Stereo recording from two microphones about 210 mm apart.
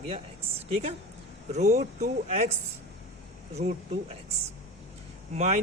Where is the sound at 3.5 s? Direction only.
30° right (ahead or behind).